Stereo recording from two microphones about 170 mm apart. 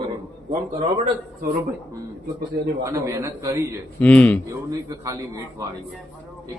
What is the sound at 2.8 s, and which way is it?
A man's voice, 20° right (ahead or behind).